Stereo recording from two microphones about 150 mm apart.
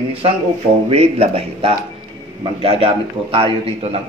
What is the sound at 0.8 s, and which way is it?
Speech, 45° right (ahead or behind).